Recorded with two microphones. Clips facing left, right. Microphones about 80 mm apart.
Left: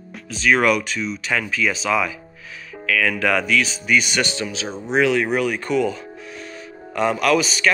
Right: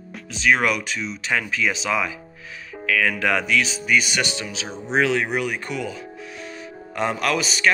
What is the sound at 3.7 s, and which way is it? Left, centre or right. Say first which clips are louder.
Speech: left 1 dB; centre.